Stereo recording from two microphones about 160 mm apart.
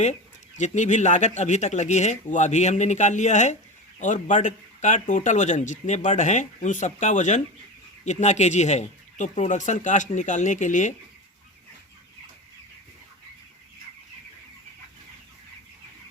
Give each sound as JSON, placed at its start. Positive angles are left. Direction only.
{"t": 0.0, "sound": "speech", "side_deg": 45}